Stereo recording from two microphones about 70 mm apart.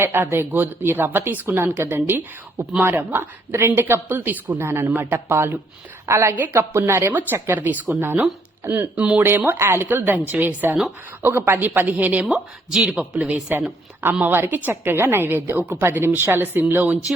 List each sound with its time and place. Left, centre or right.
0.0 s speech: right
6.1 s speech: right
7.1 s a woman's voice: right
7.3 s speech: right
7.6 s a woman's voice: right